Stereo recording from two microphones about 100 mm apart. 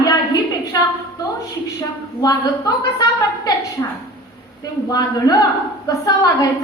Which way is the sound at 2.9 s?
40° left (ahead or behind).